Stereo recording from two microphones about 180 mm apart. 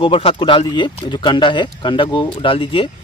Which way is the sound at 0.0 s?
30° left (ahead or behind).